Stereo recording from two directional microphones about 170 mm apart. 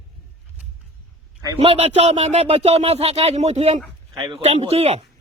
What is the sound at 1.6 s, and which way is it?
Speech, 35° right (ahead or behind).